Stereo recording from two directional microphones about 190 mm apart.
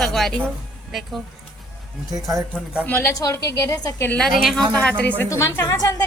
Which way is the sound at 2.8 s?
10° left (ahead or behind).